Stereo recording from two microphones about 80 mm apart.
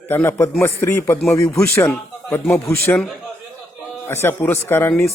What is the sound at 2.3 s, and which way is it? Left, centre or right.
Speech, left.